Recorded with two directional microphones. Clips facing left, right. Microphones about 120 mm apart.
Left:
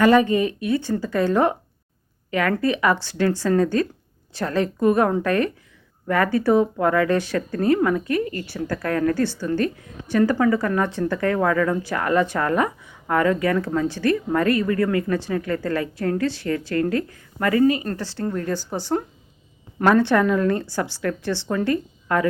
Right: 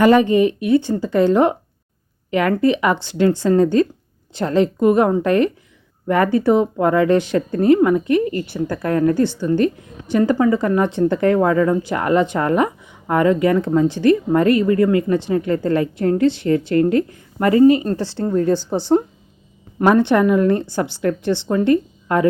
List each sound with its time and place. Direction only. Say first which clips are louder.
0.0 s speech: right 4 dB; 25° right (ahead or behind)